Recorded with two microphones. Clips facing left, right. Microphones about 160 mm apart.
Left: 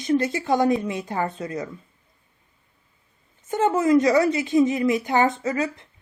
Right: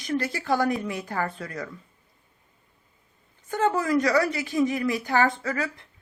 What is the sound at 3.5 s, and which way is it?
Speech, 20° left (ahead or behind).